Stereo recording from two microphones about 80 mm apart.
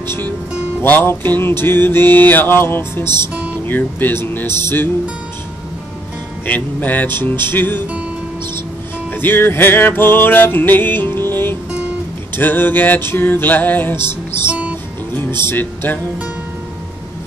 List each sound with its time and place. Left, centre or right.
0.0 s speech: left
0.8 s music: left
6.4 s music: left
9.1 s music: left
14.5 s music: centre
15.1 s music: left